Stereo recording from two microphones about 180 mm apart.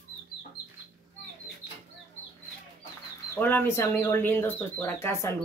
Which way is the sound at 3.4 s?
10° left (ahead or behind).